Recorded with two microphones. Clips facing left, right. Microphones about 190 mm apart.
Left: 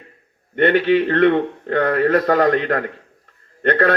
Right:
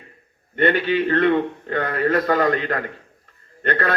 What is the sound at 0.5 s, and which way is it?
A man's voice, 70° left (ahead or behind).